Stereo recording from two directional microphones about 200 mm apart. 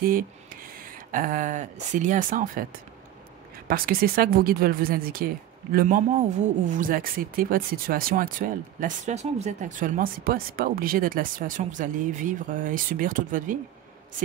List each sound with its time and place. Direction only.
0.0 s speech: 45° right (ahead or behind)